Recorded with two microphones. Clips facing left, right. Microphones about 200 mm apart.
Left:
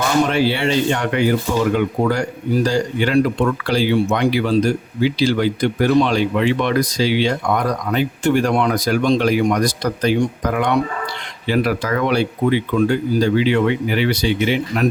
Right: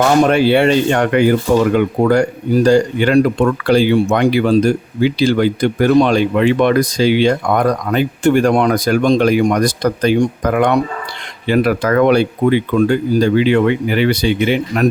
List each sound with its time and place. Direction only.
0.3 s speech: 55° right (ahead or behind)